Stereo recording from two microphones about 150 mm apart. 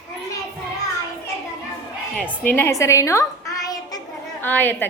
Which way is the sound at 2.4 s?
15° left (ahead or behind).